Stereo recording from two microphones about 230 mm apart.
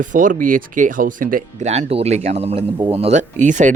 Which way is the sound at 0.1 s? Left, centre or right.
Right.